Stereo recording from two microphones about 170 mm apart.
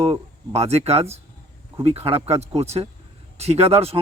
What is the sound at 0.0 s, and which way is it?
A man's voice, 35° right (ahead or behind).